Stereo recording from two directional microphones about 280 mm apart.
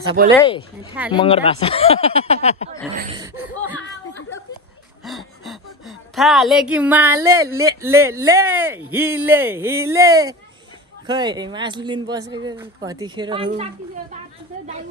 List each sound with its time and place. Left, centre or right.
0.1 s speech: right
0.4 s speech: centre
3.2 s speech: centre
5.0 s a woman's voice: centre